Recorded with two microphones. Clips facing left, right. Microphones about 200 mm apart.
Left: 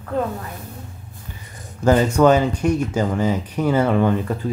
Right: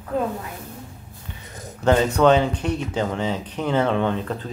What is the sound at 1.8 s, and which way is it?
Speech, 5° left (ahead or behind).